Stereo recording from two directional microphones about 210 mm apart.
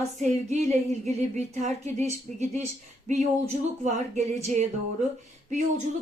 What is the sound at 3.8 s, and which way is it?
Speech, 30° right (ahead or behind).